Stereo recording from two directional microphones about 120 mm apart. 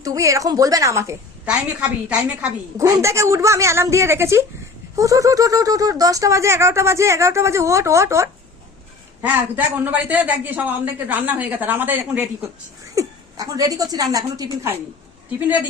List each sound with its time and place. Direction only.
0.0 s speech: 25° right (ahead or behind)
1.5 s a woman's voice: 10° right (ahead or behind)
2.7 s speech: 25° right (ahead or behind)
9.2 s a woman's voice: 15° right (ahead or behind)
13.0 s a woman's voice: 30° right (ahead or behind)
15.4 s a woman's voice: 15° right (ahead or behind)